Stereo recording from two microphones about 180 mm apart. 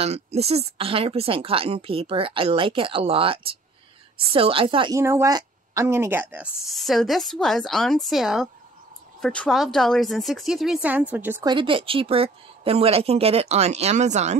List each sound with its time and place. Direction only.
0.0 s a woman's voice: 35° right (ahead or behind)
4.9 s speech: 15° right (ahead or behind)
11.4 s speech: 30° right (ahead or behind)